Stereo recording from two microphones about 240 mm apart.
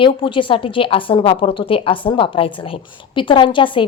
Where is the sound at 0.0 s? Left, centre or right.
Left.